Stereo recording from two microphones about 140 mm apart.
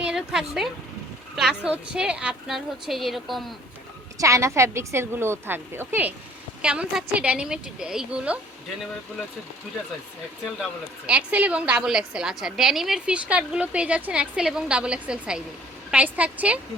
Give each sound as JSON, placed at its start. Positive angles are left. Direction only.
{"t": 0.0, "sound": "a sound", "side_deg": -5}
{"t": 1.4, "sound": "a woman's voice", "side_deg": -5}
{"t": 4.2, "sound": "a woman's voice", "side_deg": -20}
{"t": 11.0, "sound": "a woman's voice", "side_deg": -10}